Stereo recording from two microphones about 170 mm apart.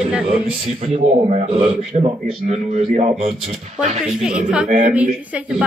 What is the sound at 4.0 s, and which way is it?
A woman's voice, 5° right (ahead or behind).